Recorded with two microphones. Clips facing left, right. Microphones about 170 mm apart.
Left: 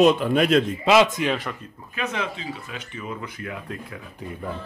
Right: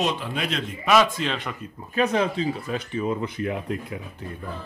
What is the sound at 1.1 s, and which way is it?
Speech, 5° left (ahead or behind).